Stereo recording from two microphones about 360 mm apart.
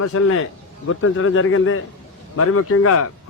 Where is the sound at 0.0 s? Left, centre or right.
Left.